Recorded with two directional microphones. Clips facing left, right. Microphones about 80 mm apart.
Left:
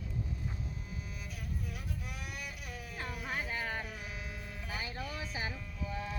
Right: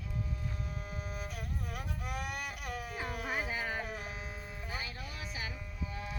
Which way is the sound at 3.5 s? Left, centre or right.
Centre.